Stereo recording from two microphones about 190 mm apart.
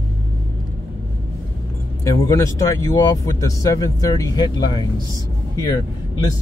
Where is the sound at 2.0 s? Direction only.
15° left (ahead or behind).